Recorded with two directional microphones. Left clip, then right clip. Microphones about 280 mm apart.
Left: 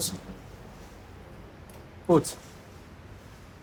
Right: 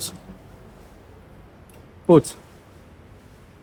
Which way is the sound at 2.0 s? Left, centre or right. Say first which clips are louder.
Right 8 dB; right.